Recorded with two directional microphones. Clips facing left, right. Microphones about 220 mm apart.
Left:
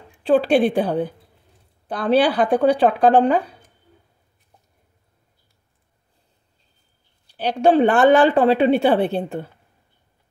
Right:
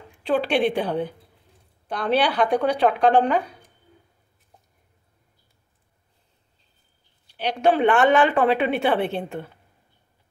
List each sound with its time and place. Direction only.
0.3 s speech: 35° left (ahead or behind)
7.3 s speech: 30° left (ahead or behind)